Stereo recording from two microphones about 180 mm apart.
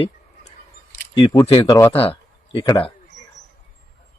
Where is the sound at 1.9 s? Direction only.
30° left (ahead or behind).